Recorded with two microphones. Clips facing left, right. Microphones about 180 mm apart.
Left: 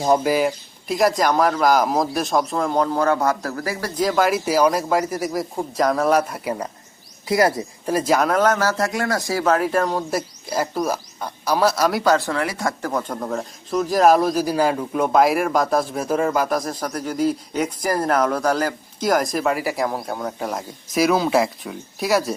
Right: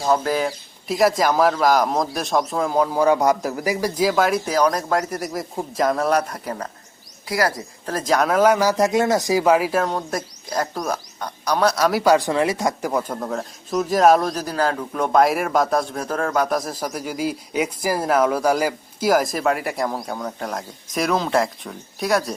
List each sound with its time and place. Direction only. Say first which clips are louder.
0.0 s speech: left 2 dB; 15° left (ahead or behind)
7.3 s speech: left 4 dB; 20° left (ahead or behind)
7.9 s speech: left 1 dB; 10° left (ahead or behind)
12.1 s speech: right 3 dB; 20° right (ahead or behind); by 22.4 s 5° left (ahead or behind)